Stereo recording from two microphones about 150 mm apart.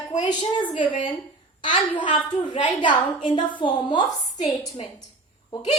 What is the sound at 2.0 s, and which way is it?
A woman's voice, 30° left (ahead or behind).